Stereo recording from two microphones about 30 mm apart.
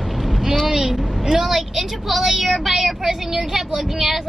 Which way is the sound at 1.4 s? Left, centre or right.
Centre.